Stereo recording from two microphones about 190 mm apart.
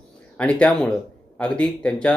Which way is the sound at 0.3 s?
5° left (ahead or behind).